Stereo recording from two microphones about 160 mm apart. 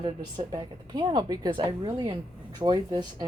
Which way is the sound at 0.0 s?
25° right (ahead or behind).